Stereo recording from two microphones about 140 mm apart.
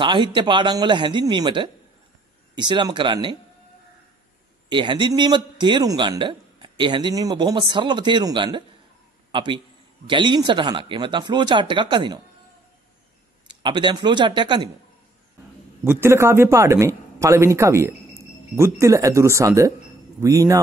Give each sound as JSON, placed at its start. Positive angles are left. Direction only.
{"t": 0.0, "sound": "a man's voice", "side_deg": -35}
{"t": 4.6, "sound": "a man's voice", "side_deg": -35}
{"t": 13.5, "sound": "a man's voice", "side_deg": -35}
{"t": 15.8, "sound": "a man's voice", "side_deg": -15}